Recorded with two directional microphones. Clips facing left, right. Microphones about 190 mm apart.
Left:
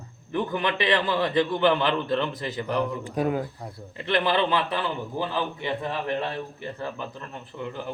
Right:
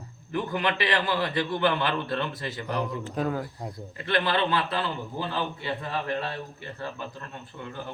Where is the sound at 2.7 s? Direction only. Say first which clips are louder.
Left 4 dB; 10° right (ahead or behind).